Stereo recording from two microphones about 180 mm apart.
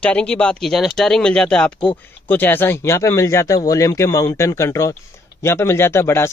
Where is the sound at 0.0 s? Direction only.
5° left (ahead or behind).